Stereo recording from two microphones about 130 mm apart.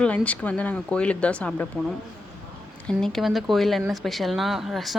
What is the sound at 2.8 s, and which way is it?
Speech, 5° left (ahead or behind).